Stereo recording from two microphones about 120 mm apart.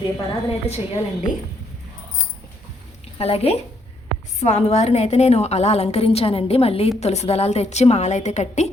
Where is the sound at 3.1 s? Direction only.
55° left (ahead or behind); by 8.7 s 70° left (ahead or behind).